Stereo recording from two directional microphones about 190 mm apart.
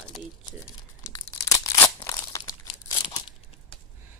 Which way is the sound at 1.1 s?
15° left (ahead or behind).